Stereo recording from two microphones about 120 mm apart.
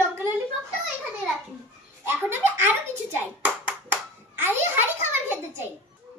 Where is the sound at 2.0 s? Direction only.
20° right (ahead or behind).